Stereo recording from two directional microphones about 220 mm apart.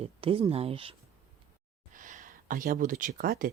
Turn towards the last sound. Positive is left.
turn(degrees=-40)  # may be behind; listen again after turning